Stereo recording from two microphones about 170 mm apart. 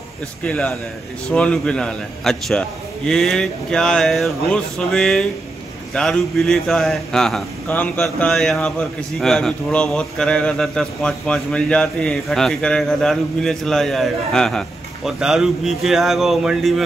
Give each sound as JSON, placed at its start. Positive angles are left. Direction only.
{"t": 0.4, "sound": "a man's voice", "side_deg": 5}